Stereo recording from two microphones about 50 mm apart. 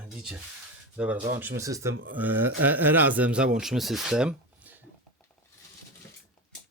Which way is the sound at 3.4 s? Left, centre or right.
Centre.